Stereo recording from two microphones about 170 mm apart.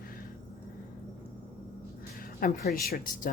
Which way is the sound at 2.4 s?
60° left (ahead or behind).